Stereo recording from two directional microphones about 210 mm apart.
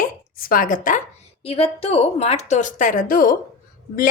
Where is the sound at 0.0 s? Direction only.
45° left (ahead or behind).